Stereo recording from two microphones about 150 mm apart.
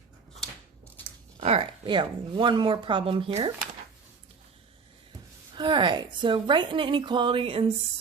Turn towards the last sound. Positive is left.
turn(degrees=-35)  # may be behind; listen again after turning